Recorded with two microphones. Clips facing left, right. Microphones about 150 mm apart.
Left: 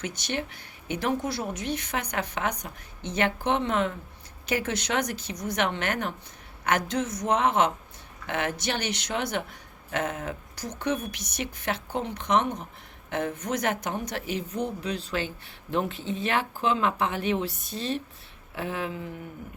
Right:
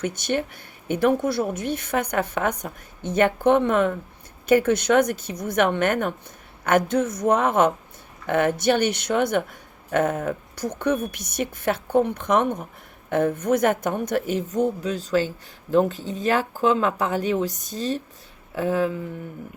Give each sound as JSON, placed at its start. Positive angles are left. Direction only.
{"t": 0.0, "sound": "a woman's voice", "side_deg": -50}